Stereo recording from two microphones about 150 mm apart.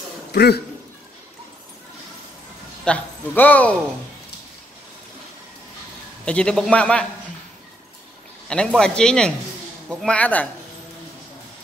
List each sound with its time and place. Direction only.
0.3 s speech: 90° left
2.8 s speech: 10° left (ahead or behind)
6.2 s a man's voice: 5° left (ahead or behind)
8.5 s a man's voice: 5° left (ahead or behind)